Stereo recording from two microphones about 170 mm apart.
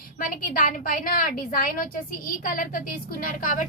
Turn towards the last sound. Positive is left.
turn(degrees=50)  # may be behind; listen again after turning